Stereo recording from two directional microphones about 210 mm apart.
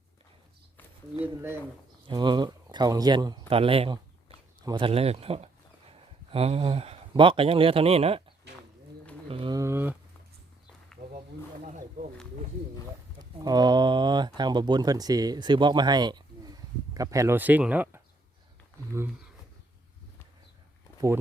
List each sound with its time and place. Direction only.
1.2 s speech: 10° right (ahead or behind); by 8.2 s 30° right (ahead or behind)
9.3 s a sound: 20° right (ahead or behind)
13.1 s speech: 20° right (ahead or behind)